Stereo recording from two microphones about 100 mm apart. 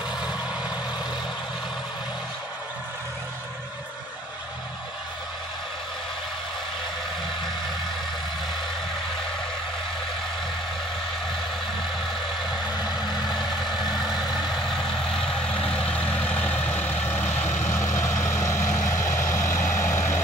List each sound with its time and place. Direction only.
15.2 s vehicle: 10° left (ahead or behind); by 20.2 s 25° left (ahead or behind)